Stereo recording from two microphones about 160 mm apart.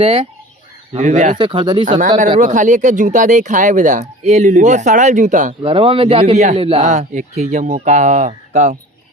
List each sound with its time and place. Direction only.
0.0 s speech: 35° right (ahead or behind)
0.9 s speech: 45° right (ahead or behind)
1.4 s speech: 30° right (ahead or behind)
2.0 s speech: 50° right (ahead or behind)
5.6 s speech: 35° right (ahead or behind); by 8.8 s 50° right (ahead or behind)